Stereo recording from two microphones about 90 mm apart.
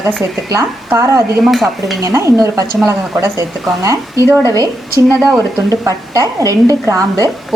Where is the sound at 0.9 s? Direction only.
35° right (ahead or behind).